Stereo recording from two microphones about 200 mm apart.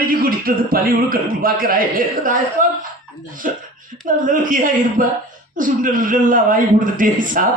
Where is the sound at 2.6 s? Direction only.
40° right (ahead or behind).